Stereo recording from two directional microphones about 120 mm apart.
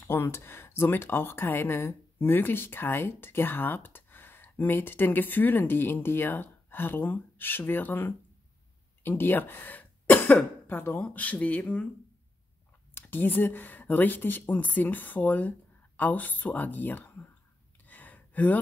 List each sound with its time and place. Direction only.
0.1 s speech: 20° left (ahead or behind)
12.9 s speech: 15° left (ahead or behind)
17.8 s a sound: 15° left (ahead or behind)